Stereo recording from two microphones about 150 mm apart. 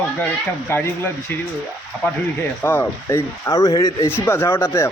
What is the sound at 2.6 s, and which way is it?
A man's voice, 15° left (ahead or behind).